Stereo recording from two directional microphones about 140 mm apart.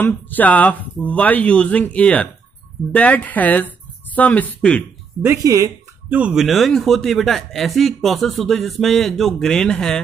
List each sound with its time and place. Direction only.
0.0 s speech: 10° left (ahead or behind)
5.2 s speech: 20° right (ahead or behind)
6.0 s speech: 10° right (ahead or behind)